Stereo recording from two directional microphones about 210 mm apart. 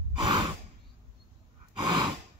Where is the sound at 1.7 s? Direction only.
20° right (ahead or behind).